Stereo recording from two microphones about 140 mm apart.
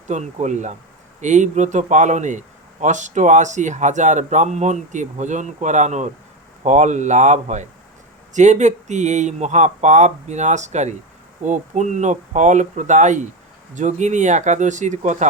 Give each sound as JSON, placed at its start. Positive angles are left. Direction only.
{"t": 0.1, "sound": "speech", "side_deg": -55}